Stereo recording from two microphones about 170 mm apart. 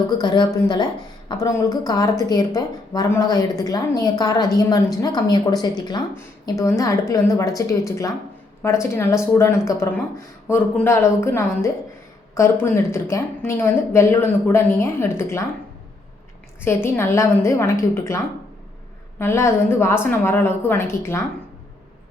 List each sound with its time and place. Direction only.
0.1 s speech: 25° left (ahead or behind)
16.6 s speech: 15° left (ahead or behind)
19.2 s speech: 15° left (ahead or behind)